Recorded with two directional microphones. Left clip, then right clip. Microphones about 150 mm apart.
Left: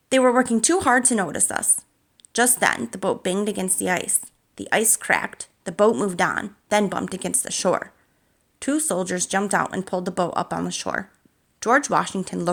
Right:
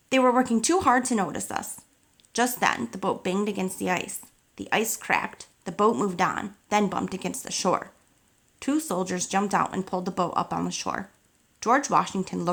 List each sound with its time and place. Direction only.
0.1 s speech: 30° left (ahead or behind)